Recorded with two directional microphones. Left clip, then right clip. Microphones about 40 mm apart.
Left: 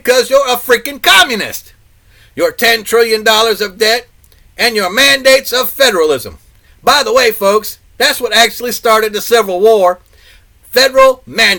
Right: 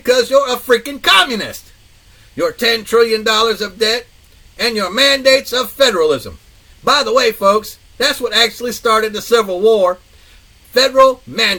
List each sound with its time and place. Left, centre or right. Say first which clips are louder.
0.0 s speech: left 3 dB; left
2.6 s speech: left 2 dB; left
5.4 s speech: left 3 dB; left